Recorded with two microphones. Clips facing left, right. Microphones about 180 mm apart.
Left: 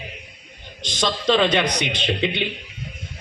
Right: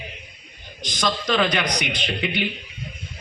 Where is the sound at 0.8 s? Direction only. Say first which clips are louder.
Left 2 dB; 25° left (ahead or behind).